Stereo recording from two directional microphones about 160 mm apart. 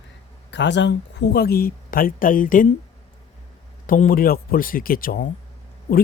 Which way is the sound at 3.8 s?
60° left (ahead or behind).